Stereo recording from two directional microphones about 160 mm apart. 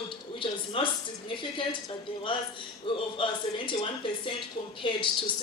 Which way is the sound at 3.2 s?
35° left (ahead or behind).